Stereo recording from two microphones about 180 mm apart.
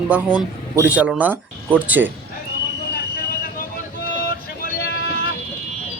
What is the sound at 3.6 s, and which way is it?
Vehicle, 55° left (ahead or behind).